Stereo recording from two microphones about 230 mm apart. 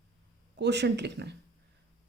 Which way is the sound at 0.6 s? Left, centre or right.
Right.